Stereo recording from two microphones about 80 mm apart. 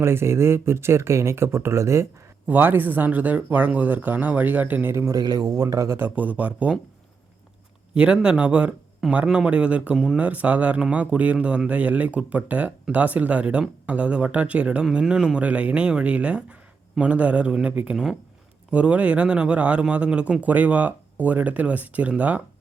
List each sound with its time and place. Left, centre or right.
0.0 s speech: right
2.5 s speech: right
5.0 s a man's voice: right
5.5 s speech: right
6.0 s speech: right
7.9 s speech: centre
17.9 s speech: centre
18.7 s speech: centre